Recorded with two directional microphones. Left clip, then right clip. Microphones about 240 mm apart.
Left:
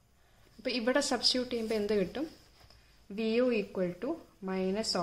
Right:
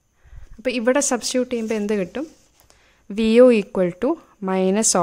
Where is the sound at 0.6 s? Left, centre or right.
Right.